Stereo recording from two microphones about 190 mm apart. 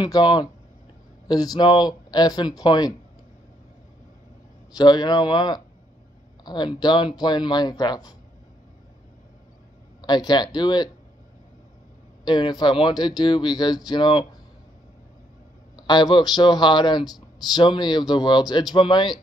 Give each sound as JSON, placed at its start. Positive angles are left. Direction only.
{"t": 0.0, "sound": "speech", "side_deg": 20}
{"t": 4.7, "sound": "speech", "side_deg": 20}
{"t": 10.0, "sound": "speech", "side_deg": 20}
{"t": 12.3, "sound": "speech", "side_deg": 20}
{"t": 15.7, "sound": "speech", "side_deg": 20}